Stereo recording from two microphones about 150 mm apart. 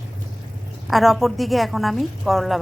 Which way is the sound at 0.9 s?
Centre (ahead or behind).